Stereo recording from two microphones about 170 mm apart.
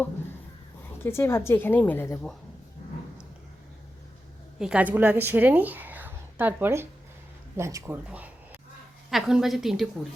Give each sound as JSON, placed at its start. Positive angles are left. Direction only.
{"t": 1.0, "sound": "a woman's voice", "side_deg": 15}
{"t": 4.6, "sound": "a woman's voice", "side_deg": -5}